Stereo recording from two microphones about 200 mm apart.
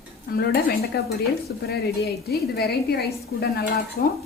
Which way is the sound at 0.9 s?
55° left (ahead or behind).